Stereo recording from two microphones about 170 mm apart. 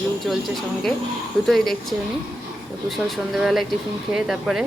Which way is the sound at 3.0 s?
5° right (ahead or behind).